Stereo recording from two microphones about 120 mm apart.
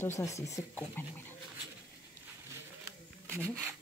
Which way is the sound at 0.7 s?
15° left (ahead or behind).